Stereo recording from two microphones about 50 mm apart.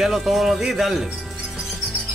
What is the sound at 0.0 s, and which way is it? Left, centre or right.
Speech, centre.